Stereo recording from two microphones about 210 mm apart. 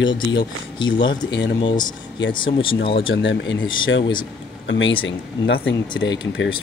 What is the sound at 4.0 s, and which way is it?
Speech, 20° left (ahead or behind).